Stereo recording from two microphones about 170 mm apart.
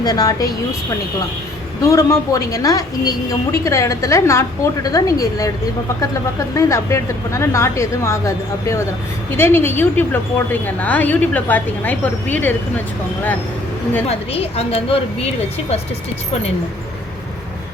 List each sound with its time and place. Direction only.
0.0 s a woman's voice: 20° left (ahead or behind)
1.8 s a woman's voice: 20° left (ahead or behind)
6.6 s a woman's voice: 15° left (ahead or behind)
14.1 s a woman's voice: 35° left (ahead or behind)